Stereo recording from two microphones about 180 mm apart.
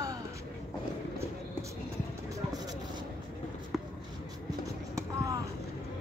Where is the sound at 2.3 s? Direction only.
20° right (ahead or behind).